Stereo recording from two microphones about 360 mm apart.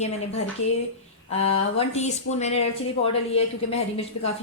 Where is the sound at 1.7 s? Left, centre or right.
Centre.